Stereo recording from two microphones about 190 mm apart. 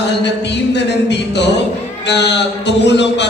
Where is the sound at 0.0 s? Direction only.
65° left (ahead or behind).